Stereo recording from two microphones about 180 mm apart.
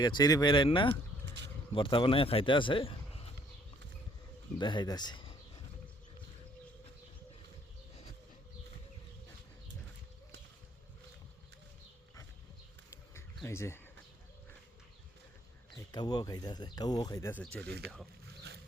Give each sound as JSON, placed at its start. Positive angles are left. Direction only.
{"t": 0.0, "sound": "speech", "side_deg": 20}
{"t": 4.5, "sound": "speech", "side_deg": 25}
{"t": 12.9, "sound": "a sound", "side_deg": 15}
{"t": 15.7, "sound": "speech", "side_deg": 25}
{"t": 17.4, "sound": "speech", "side_deg": 5}
{"t": 17.7, "sound": "speech", "side_deg": -65}